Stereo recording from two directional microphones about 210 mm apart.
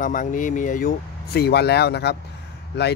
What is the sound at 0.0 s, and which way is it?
Speech, 40° left (ahead or behind).